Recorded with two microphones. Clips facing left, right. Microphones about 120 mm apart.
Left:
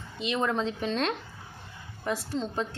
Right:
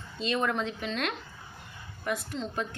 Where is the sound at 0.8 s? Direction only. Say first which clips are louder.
Left 4 dB; 35° left (ahead or behind).